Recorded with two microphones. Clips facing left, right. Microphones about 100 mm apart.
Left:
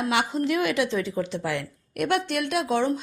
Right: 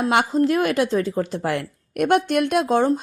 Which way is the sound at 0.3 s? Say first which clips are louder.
Right 5 dB; 40° right (ahead or behind).